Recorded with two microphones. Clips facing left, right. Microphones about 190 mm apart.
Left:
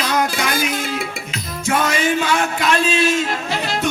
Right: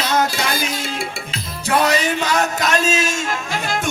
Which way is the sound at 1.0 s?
30° right (ahead or behind).